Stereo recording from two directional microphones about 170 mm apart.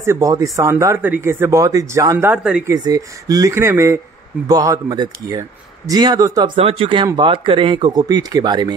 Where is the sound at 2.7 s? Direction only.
20° right (ahead or behind).